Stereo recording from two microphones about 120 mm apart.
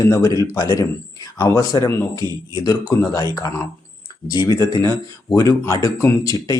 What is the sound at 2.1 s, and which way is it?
Speech, 30° right (ahead or behind).